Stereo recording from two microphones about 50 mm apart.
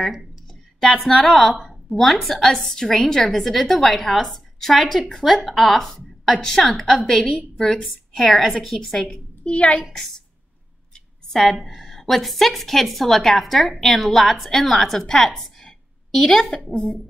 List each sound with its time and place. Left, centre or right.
0.7 s a woman's voice: centre
7.5 s a woman's voice: centre
8.1 s a woman's voice: centre
9.0 s a woman's voice: left
9.9 s a woman's voice: centre
11.6 s a woman's voice: centre